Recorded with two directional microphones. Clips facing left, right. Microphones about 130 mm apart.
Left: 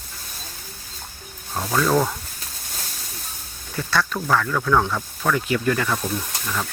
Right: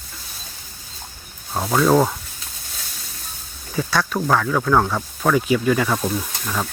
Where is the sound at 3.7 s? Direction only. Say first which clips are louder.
Right 2 dB; 10° right (ahead or behind).